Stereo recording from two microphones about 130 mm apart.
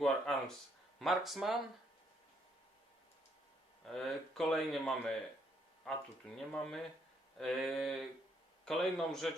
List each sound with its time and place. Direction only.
0.0 s speech: 5° left (ahead or behind)
3.8 s speech: 5° left (ahead or behind)